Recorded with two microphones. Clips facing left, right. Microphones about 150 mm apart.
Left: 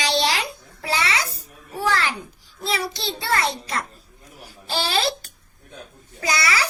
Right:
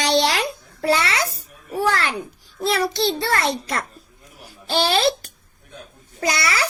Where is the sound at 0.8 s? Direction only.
55° right (ahead or behind).